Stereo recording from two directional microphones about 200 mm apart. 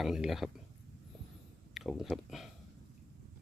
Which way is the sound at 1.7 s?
Centre (ahead or behind).